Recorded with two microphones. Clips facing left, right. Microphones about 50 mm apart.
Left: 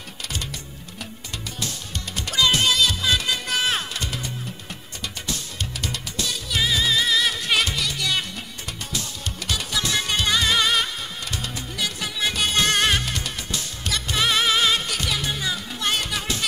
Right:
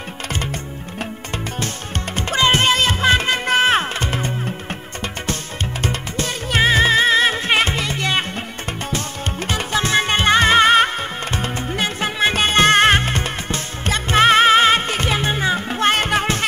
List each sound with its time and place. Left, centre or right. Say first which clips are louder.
0.3 s music: right 7 dB; right
2.1 s music: right 4 dB; right
9.5 s music: right 6 dB; right